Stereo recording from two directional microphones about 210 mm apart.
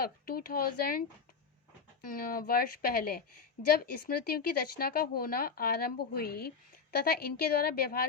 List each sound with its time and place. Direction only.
0.0 s speech: 45° left (ahead or behind)
2.0 s speech: 45° left (ahead or behind)